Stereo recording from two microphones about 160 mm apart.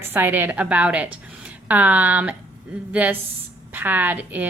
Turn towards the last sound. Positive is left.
turn(degrees=-10)  # may be behind; listen again after turning